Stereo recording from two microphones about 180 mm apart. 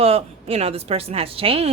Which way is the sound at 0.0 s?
35° right (ahead or behind).